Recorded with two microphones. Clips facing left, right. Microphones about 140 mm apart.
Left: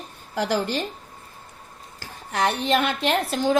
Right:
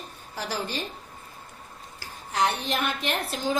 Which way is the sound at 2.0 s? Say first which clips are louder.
Left 1 dB; 60° left (ahead or behind).